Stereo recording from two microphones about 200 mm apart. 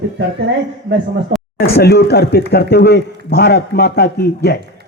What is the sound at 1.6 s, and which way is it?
Speech, 55° left (ahead or behind).